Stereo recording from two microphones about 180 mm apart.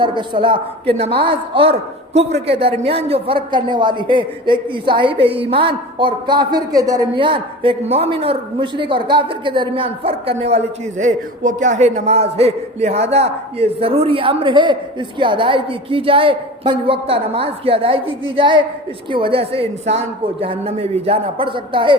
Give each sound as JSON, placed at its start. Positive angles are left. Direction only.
{"t": 0.0, "sound": "a man's voice", "side_deg": -25}